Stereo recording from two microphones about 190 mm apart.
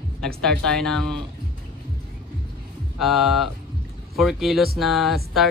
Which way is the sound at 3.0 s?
Centre (ahead or behind).